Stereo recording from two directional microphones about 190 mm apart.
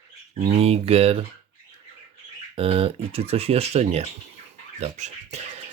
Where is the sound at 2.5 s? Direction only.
30° right (ahead or behind).